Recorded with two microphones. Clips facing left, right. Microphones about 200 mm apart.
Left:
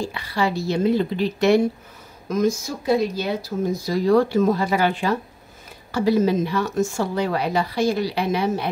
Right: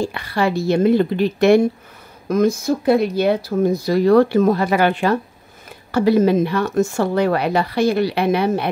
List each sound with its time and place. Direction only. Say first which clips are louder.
0.0 s speech: right 4 dB; 55° right (ahead or behind)